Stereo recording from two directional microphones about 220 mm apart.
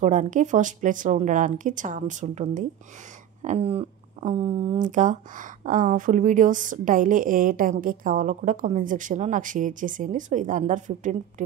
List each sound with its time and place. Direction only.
0.0 s speech: 35° right (ahead or behind)